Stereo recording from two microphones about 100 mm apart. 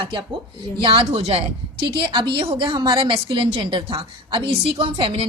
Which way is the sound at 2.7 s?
40° right (ahead or behind).